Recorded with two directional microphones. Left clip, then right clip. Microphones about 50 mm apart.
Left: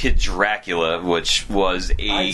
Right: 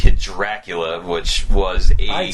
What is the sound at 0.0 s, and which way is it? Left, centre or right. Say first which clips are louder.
Speech: left 3 dB; left.